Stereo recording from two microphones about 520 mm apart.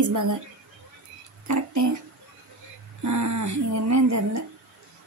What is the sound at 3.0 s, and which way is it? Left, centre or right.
Speech, right.